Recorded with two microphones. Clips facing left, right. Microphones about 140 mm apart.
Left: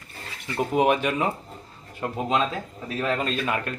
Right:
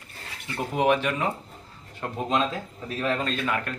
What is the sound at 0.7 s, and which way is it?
Speech, 15° left (ahead or behind).